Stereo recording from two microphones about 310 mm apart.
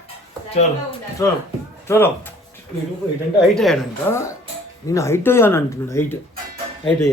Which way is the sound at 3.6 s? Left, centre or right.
Centre.